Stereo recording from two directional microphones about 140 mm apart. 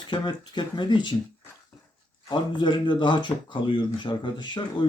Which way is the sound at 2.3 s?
35° left (ahead or behind).